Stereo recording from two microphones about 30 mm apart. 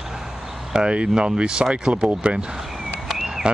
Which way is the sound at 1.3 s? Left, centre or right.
Right.